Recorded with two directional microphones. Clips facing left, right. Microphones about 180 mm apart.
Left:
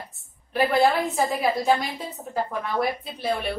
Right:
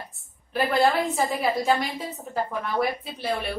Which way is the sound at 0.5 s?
Centre (ahead or behind).